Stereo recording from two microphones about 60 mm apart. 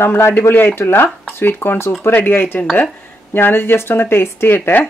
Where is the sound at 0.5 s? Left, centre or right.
Left.